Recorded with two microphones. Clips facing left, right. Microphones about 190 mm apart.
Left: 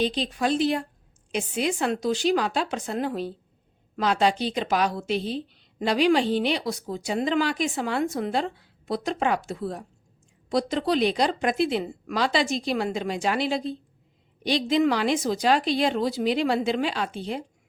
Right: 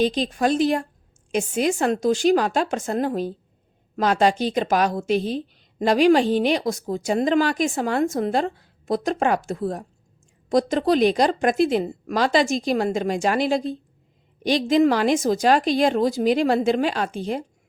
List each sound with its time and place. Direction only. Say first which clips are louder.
0.0 s a woman's voice: right 4 dB; 45° right (ahead or behind)